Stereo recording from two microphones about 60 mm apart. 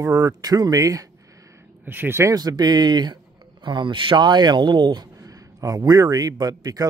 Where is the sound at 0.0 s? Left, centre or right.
Right.